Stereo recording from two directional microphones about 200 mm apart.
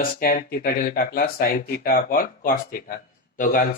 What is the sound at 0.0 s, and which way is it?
Speech, 45° left (ahead or behind).